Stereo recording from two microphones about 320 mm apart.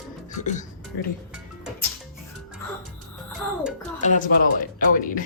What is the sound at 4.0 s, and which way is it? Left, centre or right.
Speech, left.